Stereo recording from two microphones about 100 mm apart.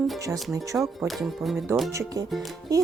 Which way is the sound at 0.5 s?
30° right (ahead or behind).